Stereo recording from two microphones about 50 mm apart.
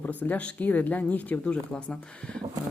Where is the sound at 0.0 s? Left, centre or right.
Left.